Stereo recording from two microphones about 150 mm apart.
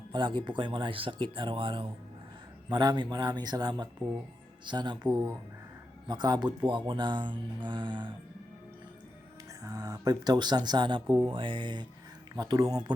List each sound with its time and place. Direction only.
0.1 s speech: 30° right (ahead or behind)
9.6 s speech: 25° right (ahead or behind)